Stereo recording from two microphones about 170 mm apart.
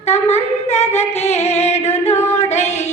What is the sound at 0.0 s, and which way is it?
Singing, 40° left (ahead or behind).